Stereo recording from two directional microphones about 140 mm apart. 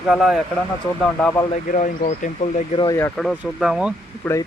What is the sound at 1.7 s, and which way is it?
Speech, 65° left (ahead or behind).